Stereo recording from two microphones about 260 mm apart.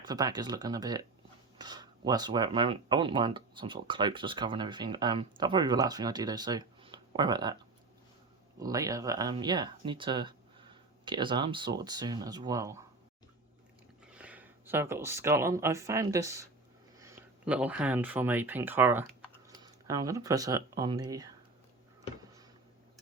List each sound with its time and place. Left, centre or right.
0.0 s speech: centre
14.1 s speech: centre